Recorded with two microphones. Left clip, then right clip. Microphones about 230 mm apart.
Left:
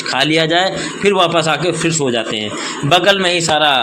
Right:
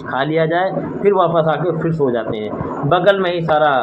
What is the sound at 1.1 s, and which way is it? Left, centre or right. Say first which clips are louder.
Speech: left 1 dB; left.